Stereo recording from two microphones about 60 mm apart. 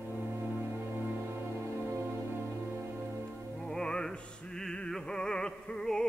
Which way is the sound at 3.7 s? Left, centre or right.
Centre.